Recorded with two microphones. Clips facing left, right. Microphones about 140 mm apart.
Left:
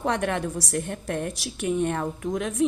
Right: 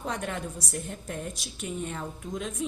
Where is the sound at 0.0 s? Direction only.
70° left (ahead or behind).